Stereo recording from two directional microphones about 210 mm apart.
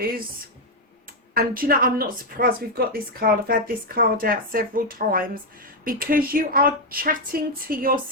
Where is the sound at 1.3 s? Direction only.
45° right (ahead or behind).